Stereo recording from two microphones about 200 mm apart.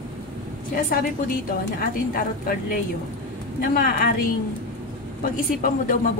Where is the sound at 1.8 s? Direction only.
45° left (ahead or behind).